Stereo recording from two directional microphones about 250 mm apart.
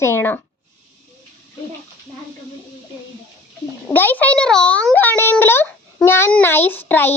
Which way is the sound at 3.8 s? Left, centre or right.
Centre.